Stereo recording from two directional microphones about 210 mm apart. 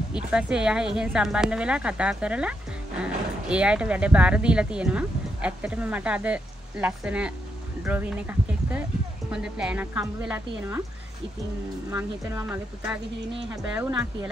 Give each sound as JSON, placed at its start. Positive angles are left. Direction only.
{"t": 0.1, "sound": "speech", "side_deg": -5}
{"t": 11.9, "sound": "speech", "side_deg": -10}